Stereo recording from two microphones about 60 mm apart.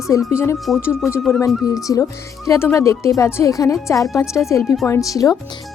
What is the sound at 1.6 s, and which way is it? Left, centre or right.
Speech, left.